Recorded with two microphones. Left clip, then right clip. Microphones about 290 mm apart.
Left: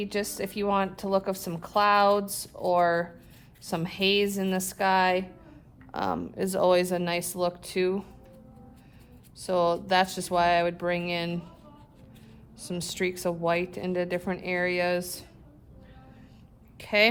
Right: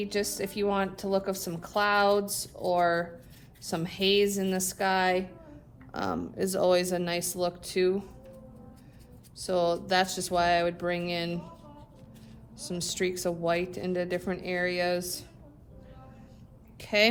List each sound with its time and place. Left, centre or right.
0.0 s a woman's voice: left
9.4 s a woman's voice: left
12.5 s a woman's voice: left
16.7 s speech: left